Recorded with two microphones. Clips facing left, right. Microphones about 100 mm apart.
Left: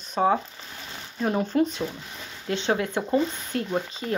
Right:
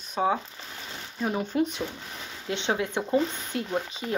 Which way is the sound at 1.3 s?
45° left (ahead or behind).